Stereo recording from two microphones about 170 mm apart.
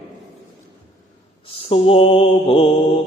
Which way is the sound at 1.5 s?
35° left (ahead or behind).